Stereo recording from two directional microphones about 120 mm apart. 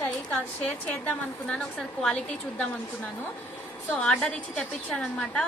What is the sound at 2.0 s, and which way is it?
Speech, 5° left (ahead or behind).